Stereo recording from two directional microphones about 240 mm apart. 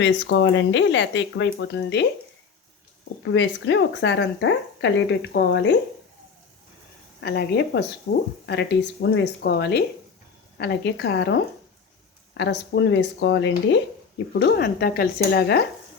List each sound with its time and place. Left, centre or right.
0.0 s speech: left
3.3 s speech: left
7.2 s speech: left
12.4 s speech: left